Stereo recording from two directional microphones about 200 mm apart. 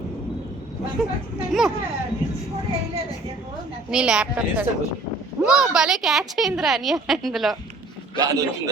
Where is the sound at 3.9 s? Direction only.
5° right (ahead or behind).